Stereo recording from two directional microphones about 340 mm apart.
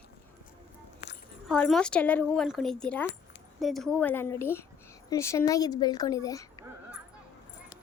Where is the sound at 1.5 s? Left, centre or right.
Centre.